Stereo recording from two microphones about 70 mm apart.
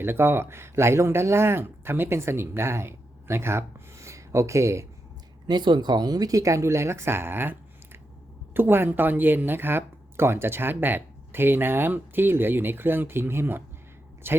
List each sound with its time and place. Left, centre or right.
0.0 s speech: right
5.5 s speech: right
8.5 s speech: right